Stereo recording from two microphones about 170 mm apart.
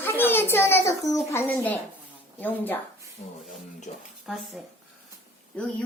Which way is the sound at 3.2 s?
40° left (ahead or behind).